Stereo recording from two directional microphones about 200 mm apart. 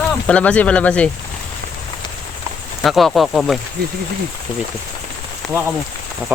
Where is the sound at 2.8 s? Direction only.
Centre (ahead or behind).